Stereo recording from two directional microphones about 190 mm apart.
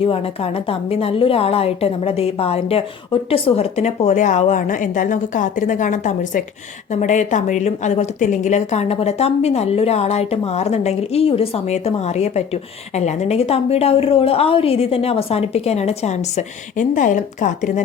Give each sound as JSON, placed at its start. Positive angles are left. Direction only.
{"t": 0.0, "sound": "a woman's voice", "side_deg": 30}